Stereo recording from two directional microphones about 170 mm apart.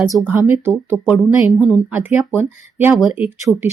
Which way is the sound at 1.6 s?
5° right (ahead or behind).